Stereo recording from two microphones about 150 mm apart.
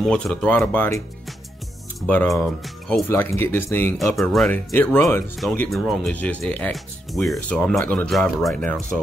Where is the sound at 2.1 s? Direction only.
10° left (ahead or behind).